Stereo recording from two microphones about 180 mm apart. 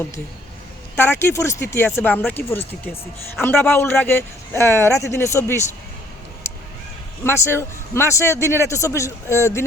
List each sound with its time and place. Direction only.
0.9 s a man's voice: 15° left (ahead or behind)
7.3 s a man's voice: 15° left (ahead or behind)